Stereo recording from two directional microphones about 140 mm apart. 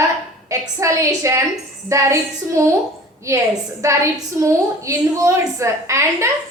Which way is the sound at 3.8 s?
20° right (ahead or behind).